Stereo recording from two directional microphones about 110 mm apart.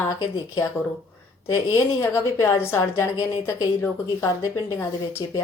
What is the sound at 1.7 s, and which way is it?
Speech, 25° left (ahead or behind).